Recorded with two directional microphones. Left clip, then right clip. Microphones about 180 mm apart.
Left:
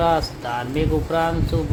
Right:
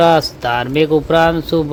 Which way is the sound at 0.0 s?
40° right (ahead or behind).